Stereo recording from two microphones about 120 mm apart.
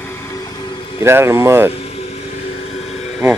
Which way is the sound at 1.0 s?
20° right (ahead or behind).